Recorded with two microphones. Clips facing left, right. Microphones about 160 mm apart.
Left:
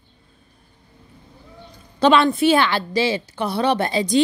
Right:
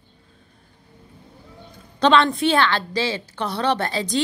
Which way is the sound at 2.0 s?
10° left (ahead or behind).